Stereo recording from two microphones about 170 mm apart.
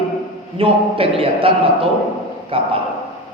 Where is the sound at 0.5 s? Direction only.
35° right (ahead or behind).